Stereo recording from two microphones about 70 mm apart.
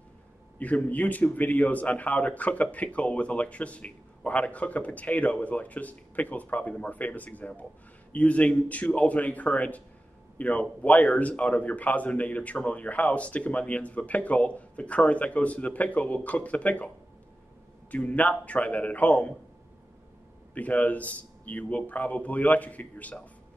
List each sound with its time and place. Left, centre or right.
0.6 s speech: left
17.9 s speech: left
20.5 s speech: left